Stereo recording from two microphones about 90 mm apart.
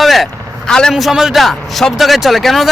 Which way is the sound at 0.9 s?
5° right (ahead or behind).